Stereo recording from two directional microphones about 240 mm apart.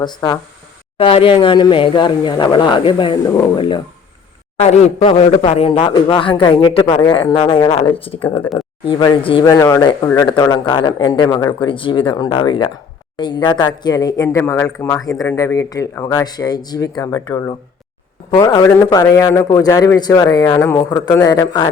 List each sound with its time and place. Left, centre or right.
0.0 s speech: centre